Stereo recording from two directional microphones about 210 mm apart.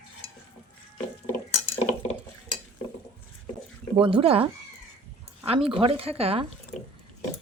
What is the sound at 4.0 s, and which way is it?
A woman's voice, 25° right (ahead or behind).